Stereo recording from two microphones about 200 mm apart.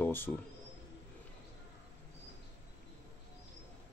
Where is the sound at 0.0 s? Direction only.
10° left (ahead or behind).